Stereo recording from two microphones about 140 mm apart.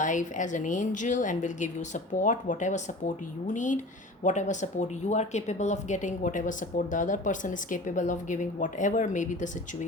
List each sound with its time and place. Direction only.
0.0 s speech: 65° left (ahead or behind)